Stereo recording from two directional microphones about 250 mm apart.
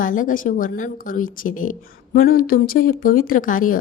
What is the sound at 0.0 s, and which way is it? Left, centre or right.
A woman's voice, left.